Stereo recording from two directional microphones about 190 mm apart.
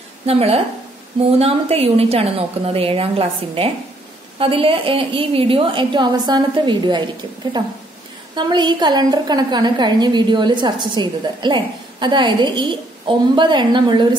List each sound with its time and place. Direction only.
0.3 s a woman's voice: 30° right (ahead or behind)